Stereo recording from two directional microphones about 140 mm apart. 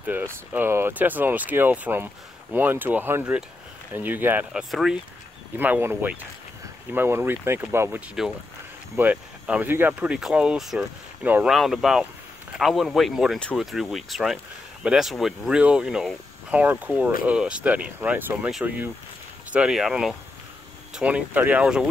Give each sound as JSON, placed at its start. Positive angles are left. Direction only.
{"t": 0.0, "sound": "speech", "side_deg": -15}
{"t": 4.6, "sound": "speech", "side_deg": 0}
{"t": 5.6, "sound": "speech", "side_deg": -15}